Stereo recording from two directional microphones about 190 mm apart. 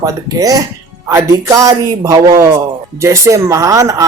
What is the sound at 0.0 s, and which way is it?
Speech, 20° right (ahead or behind).